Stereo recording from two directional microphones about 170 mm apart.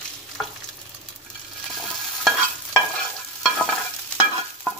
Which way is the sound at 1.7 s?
Centre (ahead or behind).